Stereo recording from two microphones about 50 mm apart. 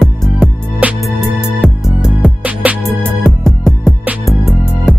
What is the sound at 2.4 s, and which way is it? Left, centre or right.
Music, right.